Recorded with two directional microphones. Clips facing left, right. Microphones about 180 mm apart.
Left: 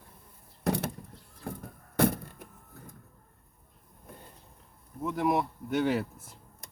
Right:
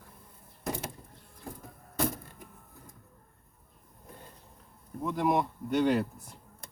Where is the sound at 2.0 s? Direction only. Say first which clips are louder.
Left 6 dB; 65° left (ahead or behind).